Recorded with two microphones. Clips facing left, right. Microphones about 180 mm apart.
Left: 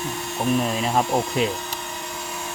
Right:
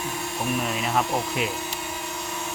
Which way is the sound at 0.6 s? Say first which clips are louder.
Left 3 dB; 30° left (ahead or behind).